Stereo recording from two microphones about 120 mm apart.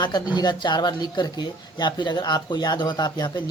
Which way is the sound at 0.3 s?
35° left (ahead or behind).